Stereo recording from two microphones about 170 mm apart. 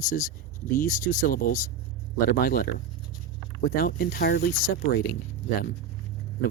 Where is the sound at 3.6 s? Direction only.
55° left (ahead or behind).